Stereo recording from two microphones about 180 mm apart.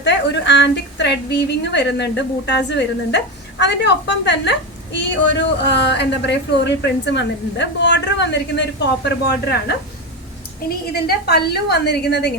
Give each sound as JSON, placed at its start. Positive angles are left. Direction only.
{"t": 0.0, "sound": "a woman's voice", "side_deg": 80}
{"t": 9.0, "sound": "a woman's voice", "side_deg": 65}
{"t": 10.9, "sound": "a woman's voice", "side_deg": 60}